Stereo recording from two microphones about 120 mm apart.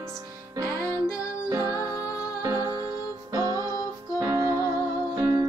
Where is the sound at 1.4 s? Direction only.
35° right (ahead or behind).